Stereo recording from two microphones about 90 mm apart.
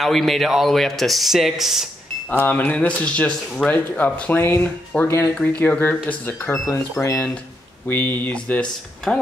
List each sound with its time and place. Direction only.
0.0 s speech: centre (ahead or behind)
2.3 s speech: 20° left (ahead or behind)
6.5 s speech: 30° left (ahead or behind); by 8.6 s 15° left (ahead or behind)
9.1 s speech: 5° left (ahead or behind)